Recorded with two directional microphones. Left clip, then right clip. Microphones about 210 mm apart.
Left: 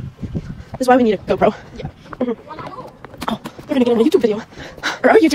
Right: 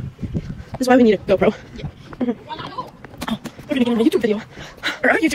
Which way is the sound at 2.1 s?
5° left (ahead or behind).